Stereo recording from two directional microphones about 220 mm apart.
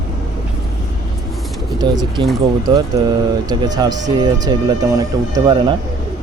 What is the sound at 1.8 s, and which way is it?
Speech, 20° right (ahead or behind).